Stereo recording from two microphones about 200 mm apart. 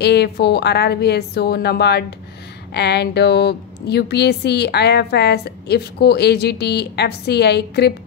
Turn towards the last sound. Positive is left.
turn(degrees=55)  # may be behind; listen again after turning